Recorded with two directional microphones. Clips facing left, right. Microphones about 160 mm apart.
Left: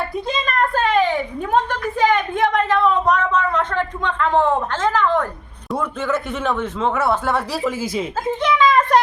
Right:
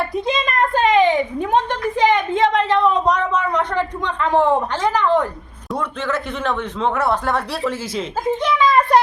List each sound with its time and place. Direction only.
0.3 s a woman's voice: 20° right (ahead or behind)
5.7 s speech: 5° left (ahead or behind)
8.4 s a sound: 10° right (ahead or behind)